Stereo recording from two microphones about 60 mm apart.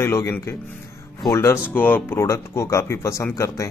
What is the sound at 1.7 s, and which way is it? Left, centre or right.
Speech, left.